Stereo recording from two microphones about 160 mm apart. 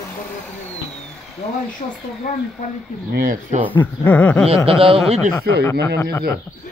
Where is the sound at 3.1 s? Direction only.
60° right (ahead or behind).